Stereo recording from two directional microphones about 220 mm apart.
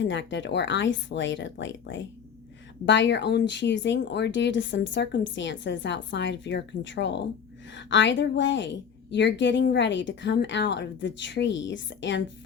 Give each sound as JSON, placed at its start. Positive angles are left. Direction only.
{"t": 0.0, "sound": "a woman's voice", "side_deg": 55}